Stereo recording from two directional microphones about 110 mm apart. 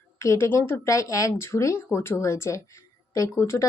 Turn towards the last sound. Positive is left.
turn(degrees=25)  # may be behind; listen again after turning